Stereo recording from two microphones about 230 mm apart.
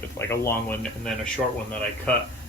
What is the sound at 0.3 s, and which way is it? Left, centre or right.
Speech, centre.